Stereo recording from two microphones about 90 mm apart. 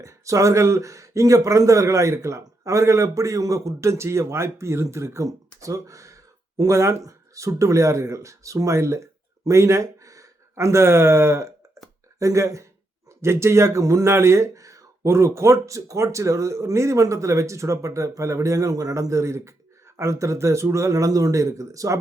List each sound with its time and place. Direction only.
0.0 s speech: 35° right (ahead or behind)